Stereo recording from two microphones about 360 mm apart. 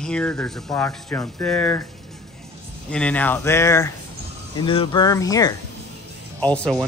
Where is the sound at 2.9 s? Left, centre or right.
Centre.